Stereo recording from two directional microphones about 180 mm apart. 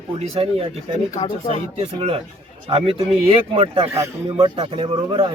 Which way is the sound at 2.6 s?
30° right (ahead or behind).